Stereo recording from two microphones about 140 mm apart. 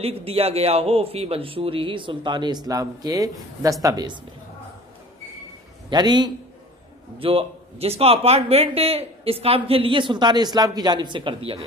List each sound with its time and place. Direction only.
0.0 s a man's voice: 45° right (ahead or behind); by 4.1 s 25° right (ahead or behind)
5.9 s a man's voice: 30° right (ahead or behind)